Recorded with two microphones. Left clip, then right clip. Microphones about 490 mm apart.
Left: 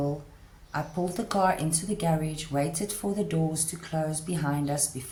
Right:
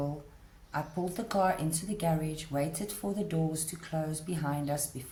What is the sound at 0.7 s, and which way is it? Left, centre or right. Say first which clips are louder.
Speech: left 4 dB; right.